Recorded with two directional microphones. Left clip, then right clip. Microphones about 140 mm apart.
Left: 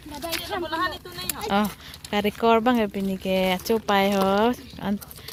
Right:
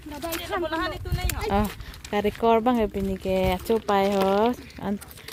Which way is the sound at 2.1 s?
5° right (ahead or behind).